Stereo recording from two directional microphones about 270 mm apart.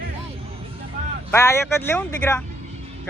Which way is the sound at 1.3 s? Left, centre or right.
Centre.